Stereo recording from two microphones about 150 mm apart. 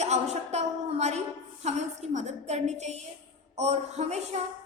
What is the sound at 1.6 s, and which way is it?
A woman's voice, 50° right (ahead or behind).